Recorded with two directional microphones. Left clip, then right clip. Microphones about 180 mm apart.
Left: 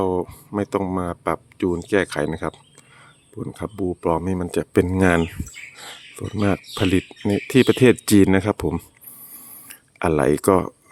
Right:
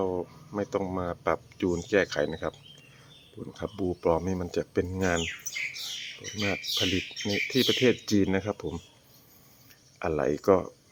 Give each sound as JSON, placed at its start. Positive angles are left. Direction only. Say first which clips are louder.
{"t": 0.0, "sound": "speech", "louder": "left 8 dB", "side_deg": 45}
{"t": 6.4, "sound": "speech", "louder": "left 6 dB", "side_deg": 60}